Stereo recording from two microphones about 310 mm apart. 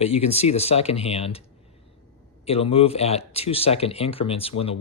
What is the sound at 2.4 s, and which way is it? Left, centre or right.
Speech, centre.